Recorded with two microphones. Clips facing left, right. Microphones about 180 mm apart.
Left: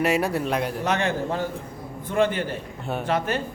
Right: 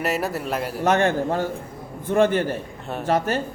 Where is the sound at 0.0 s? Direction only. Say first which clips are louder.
Left 2 dB; centre (ahead or behind).